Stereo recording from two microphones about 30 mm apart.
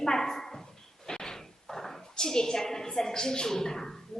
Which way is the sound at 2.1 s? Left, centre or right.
Left.